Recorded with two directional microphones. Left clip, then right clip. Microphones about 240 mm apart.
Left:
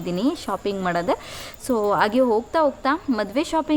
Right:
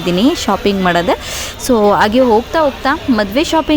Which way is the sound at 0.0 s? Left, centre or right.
Right.